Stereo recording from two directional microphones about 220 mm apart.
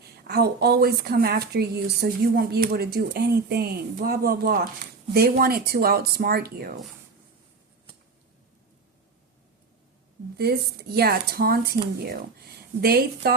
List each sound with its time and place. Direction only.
0.3 s speech: 45° right (ahead or behind)
10.3 s speech: 45° right (ahead or behind)